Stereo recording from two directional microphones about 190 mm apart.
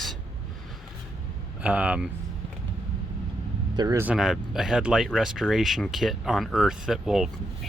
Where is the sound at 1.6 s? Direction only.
5° right (ahead or behind).